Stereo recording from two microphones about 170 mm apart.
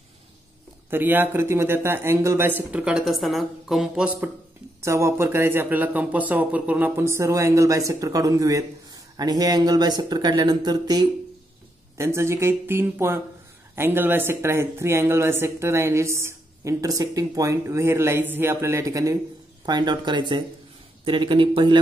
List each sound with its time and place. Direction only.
0.8 s speech: 10° right (ahead or behind); by 21.7 s 30° right (ahead or behind)